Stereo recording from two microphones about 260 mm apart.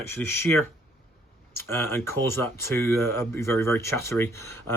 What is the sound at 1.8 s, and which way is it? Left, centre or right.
Speech, centre.